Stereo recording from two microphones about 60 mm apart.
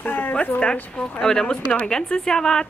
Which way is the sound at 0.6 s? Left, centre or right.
Centre.